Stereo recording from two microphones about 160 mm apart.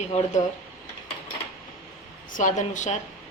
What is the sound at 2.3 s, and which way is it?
Speech, 55° left (ahead or behind).